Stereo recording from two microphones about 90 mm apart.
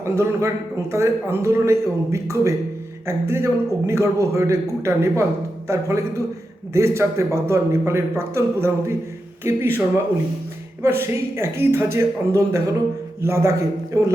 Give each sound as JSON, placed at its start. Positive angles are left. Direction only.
{"t": 0.0, "sound": "a man's voice", "side_deg": -30}
{"t": 10.8, "sound": "a man's voice", "side_deg": -30}